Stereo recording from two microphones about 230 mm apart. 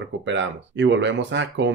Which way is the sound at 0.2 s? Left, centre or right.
Right.